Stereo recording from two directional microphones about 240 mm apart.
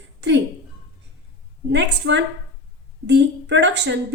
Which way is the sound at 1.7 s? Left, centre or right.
Right.